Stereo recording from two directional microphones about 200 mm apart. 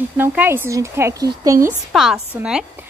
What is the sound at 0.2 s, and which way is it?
A woman's voice, 10° right (ahead or behind).